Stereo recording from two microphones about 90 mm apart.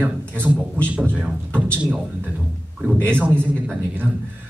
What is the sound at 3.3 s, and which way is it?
Speech, 15° left (ahead or behind).